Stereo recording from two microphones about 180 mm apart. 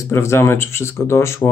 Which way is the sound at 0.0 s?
15° left (ahead or behind).